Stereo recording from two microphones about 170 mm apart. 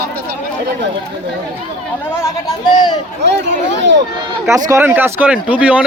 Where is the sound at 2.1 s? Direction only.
20° left (ahead or behind).